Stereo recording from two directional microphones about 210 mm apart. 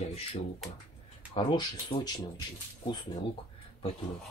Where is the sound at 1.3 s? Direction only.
20° left (ahead or behind).